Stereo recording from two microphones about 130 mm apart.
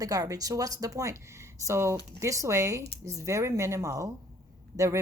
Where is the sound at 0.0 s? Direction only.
25° right (ahead or behind).